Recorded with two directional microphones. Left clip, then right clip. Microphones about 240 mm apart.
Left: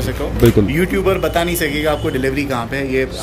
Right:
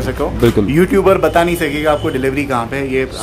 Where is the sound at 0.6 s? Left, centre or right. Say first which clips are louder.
Right 5 dB; right.